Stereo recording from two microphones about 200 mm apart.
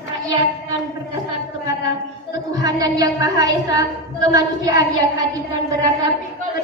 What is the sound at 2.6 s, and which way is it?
A woman's voice, 20° right (ahead or behind).